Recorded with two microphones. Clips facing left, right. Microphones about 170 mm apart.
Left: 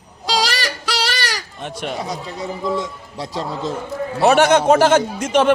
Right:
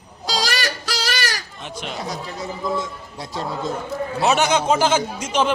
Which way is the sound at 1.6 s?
50° left (ahead or behind).